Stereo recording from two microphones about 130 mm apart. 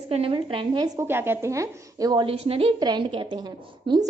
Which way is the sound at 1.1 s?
15° right (ahead or behind).